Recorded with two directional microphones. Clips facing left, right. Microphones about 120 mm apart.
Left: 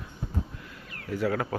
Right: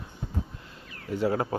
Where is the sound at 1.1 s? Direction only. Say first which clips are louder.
Right 2 dB; 25° right (ahead or behind).